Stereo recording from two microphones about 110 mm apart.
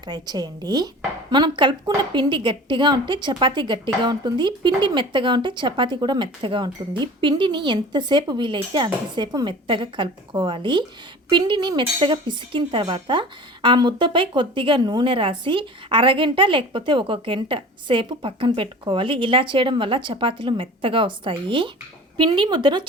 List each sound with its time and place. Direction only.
0.0 s speech: 40° right (ahead or behind)